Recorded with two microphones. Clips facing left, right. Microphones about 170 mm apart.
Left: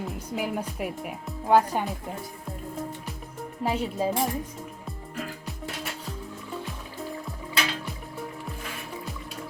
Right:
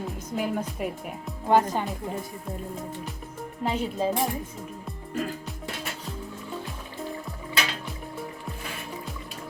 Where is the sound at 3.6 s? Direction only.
5° left (ahead or behind).